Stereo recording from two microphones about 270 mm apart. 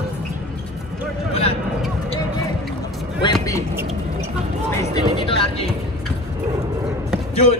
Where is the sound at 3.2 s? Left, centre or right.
Centre.